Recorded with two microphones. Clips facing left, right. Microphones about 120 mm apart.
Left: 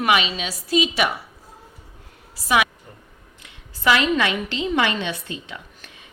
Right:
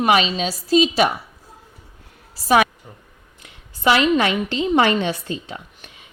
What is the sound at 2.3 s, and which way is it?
Speech, 40° right (ahead or behind).